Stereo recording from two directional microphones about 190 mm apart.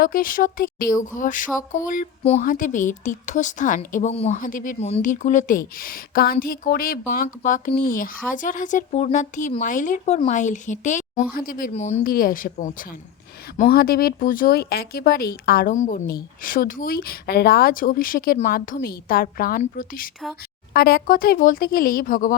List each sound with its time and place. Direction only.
0.0 s speech: 50° left (ahead or behind)
11.7 s speech: 35° left (ahead or behind)